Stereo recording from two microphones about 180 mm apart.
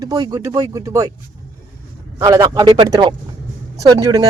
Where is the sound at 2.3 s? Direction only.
20° right (ahead or behind).